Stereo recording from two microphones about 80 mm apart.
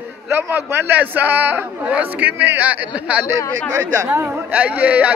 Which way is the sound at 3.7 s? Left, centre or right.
Right.